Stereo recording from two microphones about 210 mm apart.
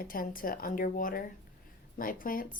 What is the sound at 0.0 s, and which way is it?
A woman's voice, 40° left (ahead or behind).